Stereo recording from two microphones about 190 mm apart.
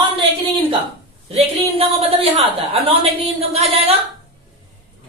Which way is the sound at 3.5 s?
30° right (ahead or behind).